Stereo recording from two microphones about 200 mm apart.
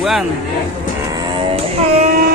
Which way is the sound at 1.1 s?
30° right (ahead or behind).